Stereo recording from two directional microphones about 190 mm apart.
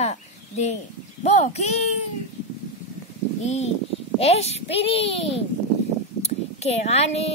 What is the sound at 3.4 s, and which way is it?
A child's voice, 35° left (ahead or behind).